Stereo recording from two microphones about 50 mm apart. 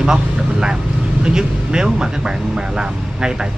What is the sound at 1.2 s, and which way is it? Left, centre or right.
Speech, centre.